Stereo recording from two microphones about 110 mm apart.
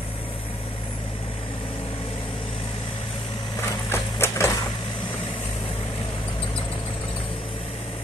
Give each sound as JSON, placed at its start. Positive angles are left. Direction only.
{"t": 3.9, "sound": "sewing machine", "side_deg": 25}